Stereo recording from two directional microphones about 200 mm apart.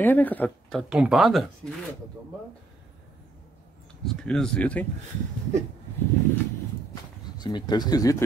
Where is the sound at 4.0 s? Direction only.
Centre (ahead or behind).